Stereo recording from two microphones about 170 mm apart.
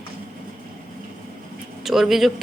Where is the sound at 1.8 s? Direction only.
Centre (ahead or behind).